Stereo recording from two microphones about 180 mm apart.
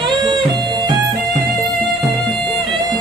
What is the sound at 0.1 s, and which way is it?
Music, 25° right (ahead or behind).